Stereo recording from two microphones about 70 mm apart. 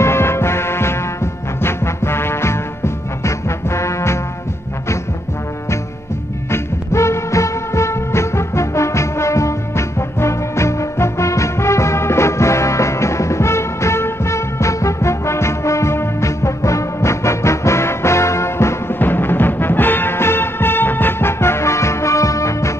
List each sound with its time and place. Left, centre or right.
0.0 s music: left
6.5 s music: left